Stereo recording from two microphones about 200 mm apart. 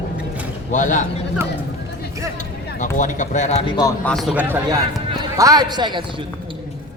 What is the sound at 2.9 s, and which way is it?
Speech, 40° left (ahead or behind).